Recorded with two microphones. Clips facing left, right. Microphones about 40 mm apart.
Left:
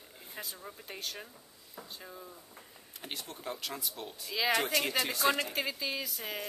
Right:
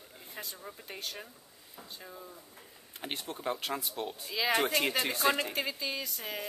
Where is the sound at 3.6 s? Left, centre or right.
Right.